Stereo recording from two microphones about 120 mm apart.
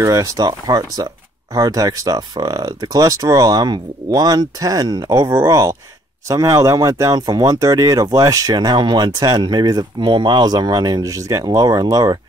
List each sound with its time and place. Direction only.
0.0 s speech: 30° right (ahead or behind)